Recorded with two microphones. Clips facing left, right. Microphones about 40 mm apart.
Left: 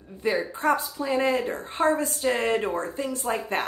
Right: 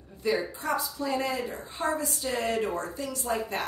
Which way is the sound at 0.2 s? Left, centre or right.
Left.